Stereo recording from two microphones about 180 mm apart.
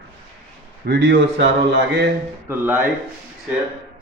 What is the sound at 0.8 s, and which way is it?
Speech, 60° right (ahead or behind).